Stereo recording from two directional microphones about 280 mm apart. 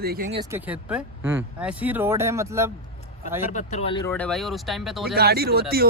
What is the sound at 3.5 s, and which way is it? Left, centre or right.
Speech, left.